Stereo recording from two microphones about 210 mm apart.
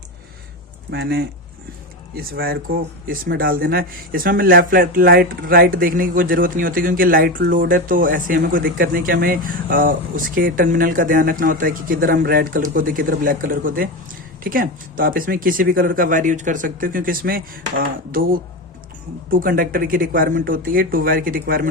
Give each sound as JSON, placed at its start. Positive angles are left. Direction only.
{"t": 0.9, "sound": "a man's voice", "side_deg": -50}